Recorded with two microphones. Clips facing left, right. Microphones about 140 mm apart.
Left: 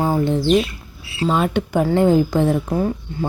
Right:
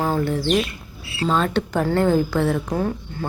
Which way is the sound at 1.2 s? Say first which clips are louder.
Left 2 dB; 10° left (ahead or behind).